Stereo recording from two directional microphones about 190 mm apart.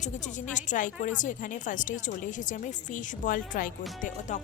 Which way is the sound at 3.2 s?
45° left (ahead or behind).